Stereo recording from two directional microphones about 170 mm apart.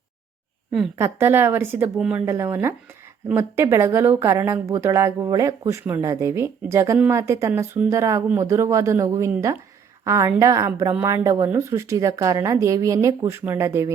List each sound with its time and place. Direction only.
0.9 s speech: 15° right (ahead or behind)